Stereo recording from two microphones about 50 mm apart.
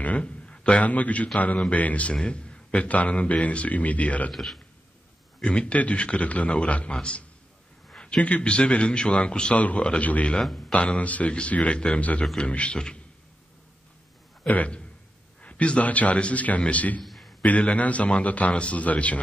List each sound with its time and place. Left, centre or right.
0.0 s a man's voice: left
4.3 s a man's voice: centre
5.4 s a man's voice: centre
14.5 s a man's voice: left
17.0 s a sound: centre
17.5 s a man's voice: left